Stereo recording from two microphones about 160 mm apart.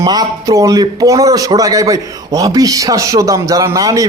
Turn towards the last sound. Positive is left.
turn(degrees=-20)  # may be behind; listen again after turning